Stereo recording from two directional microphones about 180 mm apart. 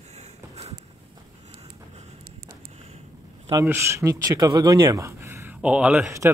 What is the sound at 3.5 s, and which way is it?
Speech, 15° right (ahead or behind).